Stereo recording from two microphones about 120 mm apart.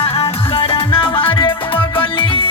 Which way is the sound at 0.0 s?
55° left (ahead or behind).